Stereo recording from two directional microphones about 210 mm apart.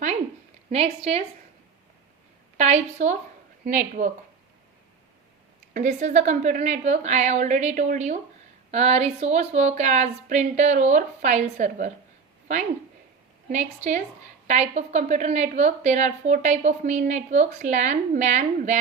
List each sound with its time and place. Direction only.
0.7 s a woman's voice: 30° right (ahead or behind)
2.6 s a woman's voice: 30° right (ahead or behind)
5.7 s a woman's voice: 35° right (ahead or behind)
13.5 s a woman's voice: 35° right (ahead or behind)